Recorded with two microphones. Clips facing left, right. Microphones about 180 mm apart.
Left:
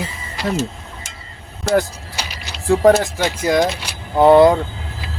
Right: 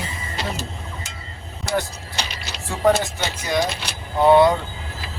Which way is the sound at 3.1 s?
90° left.